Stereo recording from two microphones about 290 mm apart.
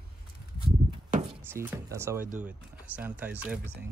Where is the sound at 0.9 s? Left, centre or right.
Right.